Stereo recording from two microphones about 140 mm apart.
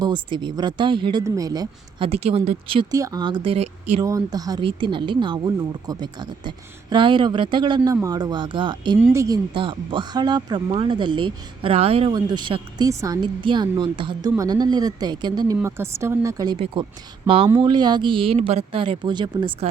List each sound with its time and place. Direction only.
0.0 s speech: 35° right (ahead or behind)
2.0 s a woman's voice: 45° right (ahead or behind)
2.9 s speech: 25° right (ahead or behind); by 4.0 s 50° right (ahead or behind)
4.0 s speech: 25° right (ahead or behind)
9.6 s speech: 35° right (ahead or behind)
12.9 s speech: 20° right (ahead or behind)
13.2 s speech: 35° right (ahead or behind)
15.6 s speech: 20° right (ahead or behind)
17.2 s speech: 40° right (ahead or behind)